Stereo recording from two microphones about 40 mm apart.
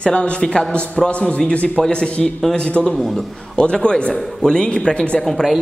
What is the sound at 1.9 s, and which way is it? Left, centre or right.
A man's voice, left.